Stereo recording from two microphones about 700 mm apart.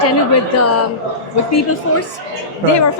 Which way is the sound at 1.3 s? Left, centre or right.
Left.